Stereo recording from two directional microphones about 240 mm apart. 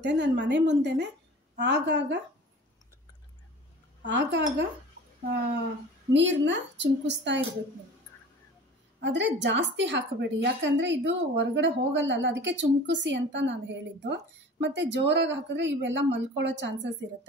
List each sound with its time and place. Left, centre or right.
0.0 s a woman's voice: right
4.0 s a woman's voice: right
6.1 s a woman's voice: right
9.0 s a woman's voice: right